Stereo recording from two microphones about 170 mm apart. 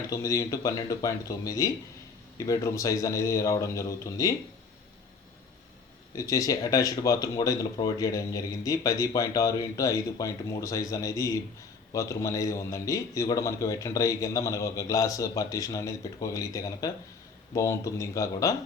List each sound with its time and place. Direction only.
0.1 s speech: 20° left (ahead or behind)
6.1 s speech: 20° left (ahead or behind)